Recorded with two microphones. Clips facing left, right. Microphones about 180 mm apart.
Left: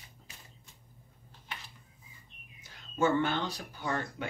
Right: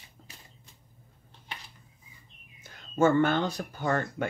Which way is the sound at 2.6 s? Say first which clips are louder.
Right 5 dB; 50° right (ahead or behind).